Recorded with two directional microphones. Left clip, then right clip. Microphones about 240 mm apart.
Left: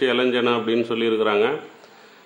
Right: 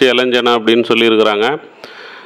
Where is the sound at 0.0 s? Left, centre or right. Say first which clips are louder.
Right 8 dB; right.